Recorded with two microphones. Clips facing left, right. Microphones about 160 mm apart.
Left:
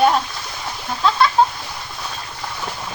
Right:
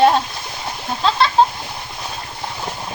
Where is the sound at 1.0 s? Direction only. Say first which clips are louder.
Even; 25° right (ahead or behind).